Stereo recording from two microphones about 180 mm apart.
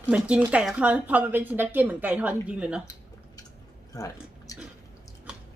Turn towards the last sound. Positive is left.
turn(degrees=20)  # may be behind; listen again after turning